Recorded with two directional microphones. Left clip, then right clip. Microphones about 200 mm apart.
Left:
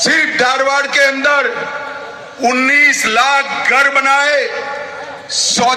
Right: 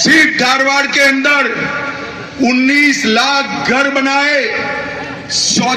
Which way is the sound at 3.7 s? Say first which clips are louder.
Left 2 dB; 35° right (ahead or behind).